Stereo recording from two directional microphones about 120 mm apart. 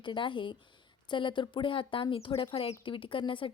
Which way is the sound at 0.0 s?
40° left (ahead or behind).